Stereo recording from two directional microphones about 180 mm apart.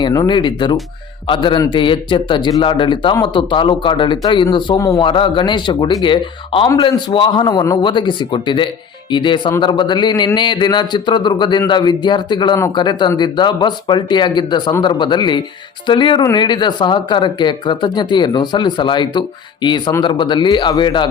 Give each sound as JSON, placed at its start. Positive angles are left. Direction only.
{"t": 0.0, "sound": "a man's voice", "side_deg": 25}